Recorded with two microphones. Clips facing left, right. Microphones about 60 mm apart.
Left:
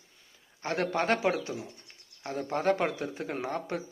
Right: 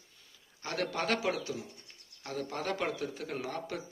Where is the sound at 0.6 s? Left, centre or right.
Left.